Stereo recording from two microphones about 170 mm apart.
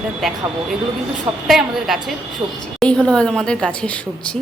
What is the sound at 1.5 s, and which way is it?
Speech, centre (ahead or behind).